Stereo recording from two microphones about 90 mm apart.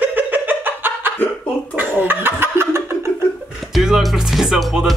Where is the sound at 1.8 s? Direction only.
20° right (ahead or behind).